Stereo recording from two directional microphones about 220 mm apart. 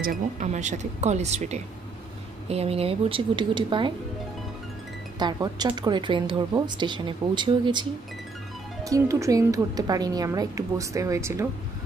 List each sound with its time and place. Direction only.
0.0 s speech: 35° right (ahead or behind)
5.2 s speech: 20° right (ahead or behind)
8.8 s speech: 15° right (ahead or behind)